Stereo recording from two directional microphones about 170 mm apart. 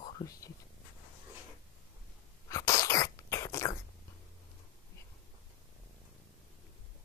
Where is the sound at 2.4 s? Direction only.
20° left (ahead or behind).